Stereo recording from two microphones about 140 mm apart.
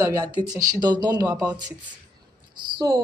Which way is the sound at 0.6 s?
30° right (ahead or behind).